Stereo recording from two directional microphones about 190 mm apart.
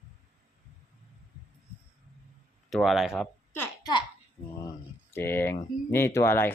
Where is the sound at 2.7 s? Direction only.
Centre (ahead or behind).